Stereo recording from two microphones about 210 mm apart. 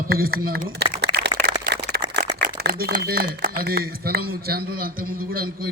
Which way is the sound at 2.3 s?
50° right (ahead or behind).